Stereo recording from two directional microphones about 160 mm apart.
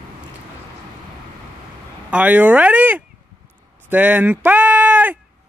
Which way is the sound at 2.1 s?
10° right (ahead or behind).